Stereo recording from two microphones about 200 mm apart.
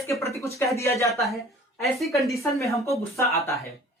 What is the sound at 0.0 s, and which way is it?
Speech, 15° left (ahead or behind).